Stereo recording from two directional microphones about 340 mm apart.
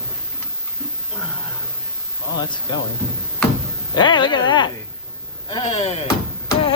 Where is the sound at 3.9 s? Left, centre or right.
Centre.